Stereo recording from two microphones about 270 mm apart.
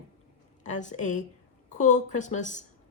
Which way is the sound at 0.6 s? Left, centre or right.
Left.